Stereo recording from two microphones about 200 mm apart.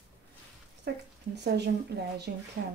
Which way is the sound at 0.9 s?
60° right (ahead or behind).